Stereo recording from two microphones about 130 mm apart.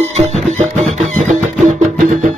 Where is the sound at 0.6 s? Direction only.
60° right (ahead or behind); by 2.3 s 80° right.